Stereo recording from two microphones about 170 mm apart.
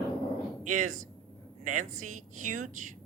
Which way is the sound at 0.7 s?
45° right (ahead or behind).